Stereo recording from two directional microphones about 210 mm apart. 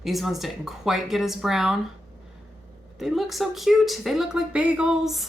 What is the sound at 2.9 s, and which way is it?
Speech, centre (ahead or behind).